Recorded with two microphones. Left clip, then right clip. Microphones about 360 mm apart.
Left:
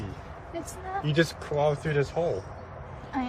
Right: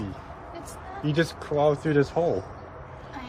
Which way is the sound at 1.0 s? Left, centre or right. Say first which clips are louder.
Right 1 dB; centre.